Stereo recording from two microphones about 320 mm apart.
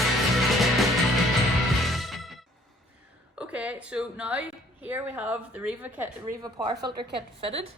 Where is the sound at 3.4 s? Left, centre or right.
Centre.